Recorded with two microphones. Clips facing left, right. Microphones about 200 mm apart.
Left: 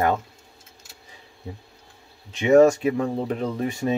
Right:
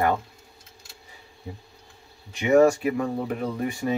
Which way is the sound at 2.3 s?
20° left (ahead or behind).